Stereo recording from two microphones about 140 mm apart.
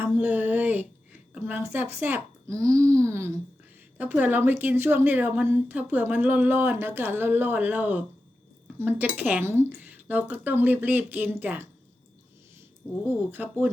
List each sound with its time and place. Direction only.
0.0 s a sound: 15° right (ahead or behind)
1.3 s a child's voice: 15° right (ahead or behind)
13.3 s a woman's voice: 15° right (ahead or behind)